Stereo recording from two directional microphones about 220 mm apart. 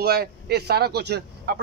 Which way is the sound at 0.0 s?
45° right (ahead or behind).